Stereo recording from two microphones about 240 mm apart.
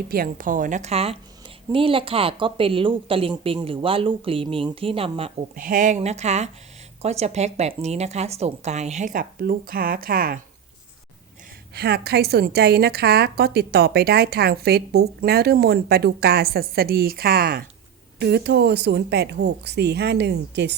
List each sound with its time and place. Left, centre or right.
0.1 s a woman's voice: right
5.5 s speech: right
11.7 s a woman's voice: right